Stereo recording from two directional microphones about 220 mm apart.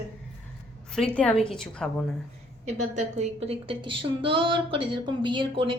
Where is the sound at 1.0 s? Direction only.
5° left (ahead or behind).